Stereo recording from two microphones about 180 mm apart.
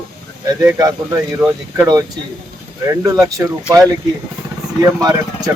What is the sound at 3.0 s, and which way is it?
Speech, 15° right (ahead or behind).